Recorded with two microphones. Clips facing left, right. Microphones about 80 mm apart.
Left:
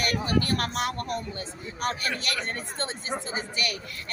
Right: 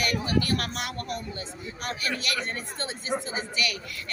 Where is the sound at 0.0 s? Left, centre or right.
Left.